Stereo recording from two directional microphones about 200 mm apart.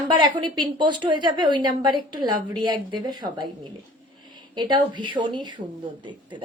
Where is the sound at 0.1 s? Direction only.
20° right (ahead or behind).